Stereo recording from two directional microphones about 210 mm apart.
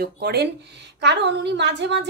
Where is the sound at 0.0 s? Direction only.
50° right (ahead or behind).